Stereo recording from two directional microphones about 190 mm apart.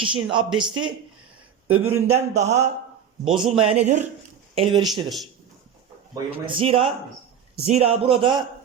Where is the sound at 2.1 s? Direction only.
40° right (ahead or behind).